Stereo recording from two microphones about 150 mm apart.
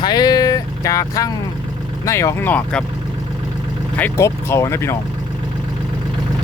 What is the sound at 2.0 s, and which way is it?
Speech, 20° left (ahead or behind).